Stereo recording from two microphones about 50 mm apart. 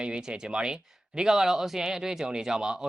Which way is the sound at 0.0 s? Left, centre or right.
Centre.